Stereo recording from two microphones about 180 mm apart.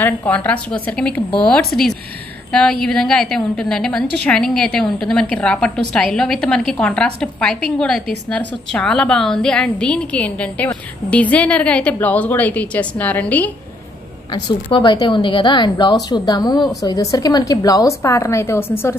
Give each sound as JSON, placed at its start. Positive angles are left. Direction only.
{"t": 0.0, "sound": "a woman's voice", "side_deg": 10}
{"t": 14.3, "sound": "a woman's voice", "side_deg": 25}